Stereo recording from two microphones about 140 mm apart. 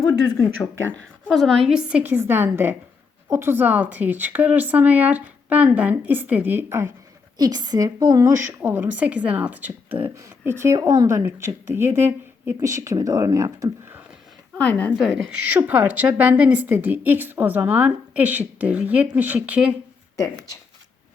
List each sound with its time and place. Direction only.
0.0 s speech: 25° left (ahead or behind)
1.3 s a woman's voice: centre (ahead or behind); by 13.7 s 20° right (ahead or behind)
14.6 s a woman's voice: 10° left (ahead or behind)
14.9 s a woman's voice: centre (ahead or behind)